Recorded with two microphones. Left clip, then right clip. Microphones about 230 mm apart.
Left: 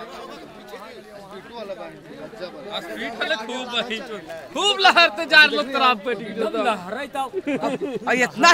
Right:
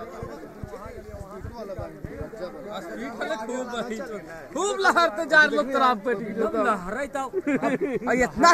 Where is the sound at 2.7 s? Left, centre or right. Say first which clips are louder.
Left 5 dB; centre.